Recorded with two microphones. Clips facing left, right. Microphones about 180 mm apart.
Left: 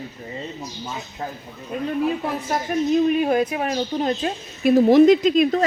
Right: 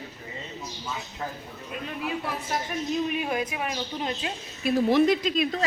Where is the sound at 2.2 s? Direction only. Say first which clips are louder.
Left 6 dB; 45° left (ahead or behind).